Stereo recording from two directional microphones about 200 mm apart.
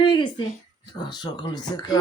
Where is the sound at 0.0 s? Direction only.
25° left (ahead or behind).